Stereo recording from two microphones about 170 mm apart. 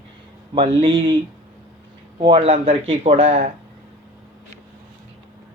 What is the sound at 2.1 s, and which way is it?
Speech, 35° right (ahead or behind).